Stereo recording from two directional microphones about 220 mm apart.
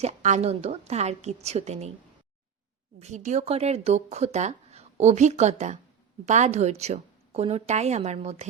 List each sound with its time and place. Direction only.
0.0 s a woman's voice: 30° right (ahead or behind)
3.0 s a woman's voice: 30° right (ahead or behind)